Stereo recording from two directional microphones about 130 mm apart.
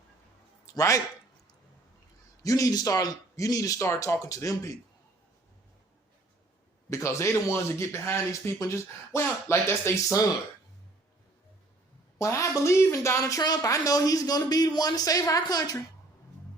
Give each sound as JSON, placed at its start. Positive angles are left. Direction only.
{"t": 0.6, "sound": "speech", "side_deg": 25}
{"t": 2.4, "sound": "speech", "side_deg": 25}
{"t": 6.9, "sound": "speech", "side_deg": 20}
{"t": 12.2, "sound": "speech", "side_deg": 20}